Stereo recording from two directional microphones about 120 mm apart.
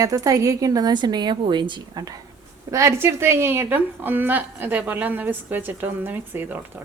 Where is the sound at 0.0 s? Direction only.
30° right (ahead or behind).